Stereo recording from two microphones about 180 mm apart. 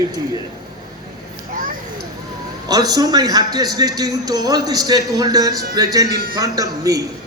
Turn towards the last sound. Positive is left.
turn(degrees=-20)  # may be behind; listen again after turning